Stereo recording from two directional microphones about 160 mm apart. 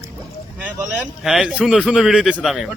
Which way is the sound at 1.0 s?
Centre (ahead or behind).